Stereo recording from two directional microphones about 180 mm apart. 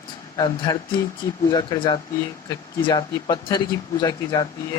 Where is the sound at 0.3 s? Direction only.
25° left (ahead or behind).